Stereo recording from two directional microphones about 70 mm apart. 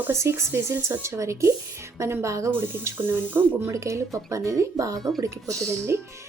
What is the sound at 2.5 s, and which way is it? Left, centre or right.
Speech, right.